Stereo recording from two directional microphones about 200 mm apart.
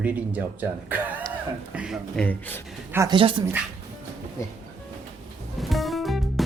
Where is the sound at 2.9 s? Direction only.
20° right (ahead or behind).